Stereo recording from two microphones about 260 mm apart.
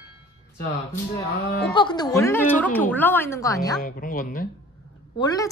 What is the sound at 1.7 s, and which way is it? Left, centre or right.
A woman's voice, centre.